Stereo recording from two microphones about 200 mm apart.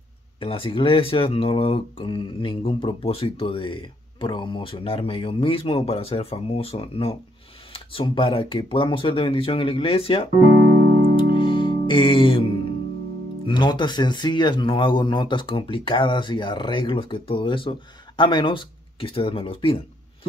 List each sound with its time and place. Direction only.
0.4 s speech: 25° left (ahead or behind)
11.1 s music: 25° left (ahead or behind)
13.5 s speech: 20° left (ahead or behind)